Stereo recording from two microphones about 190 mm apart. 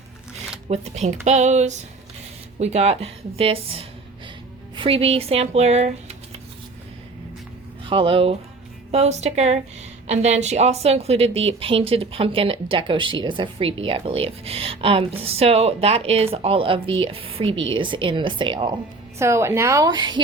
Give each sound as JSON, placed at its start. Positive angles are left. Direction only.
{"t": 0.7, "sound": "speech", "side_deg": -35}
{"t": 7.9, "sound": "a woman's voice", "side_deg": -25}
{"t": 19.2, "sound": "a woman's voice", "side_deg": -15}